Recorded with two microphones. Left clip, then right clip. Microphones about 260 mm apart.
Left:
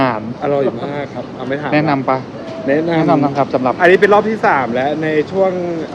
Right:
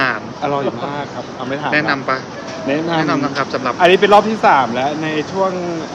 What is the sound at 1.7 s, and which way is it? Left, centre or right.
Speech, left.